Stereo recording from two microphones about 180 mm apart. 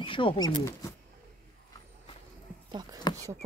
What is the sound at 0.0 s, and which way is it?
Speech, 30° left (ahead or behind).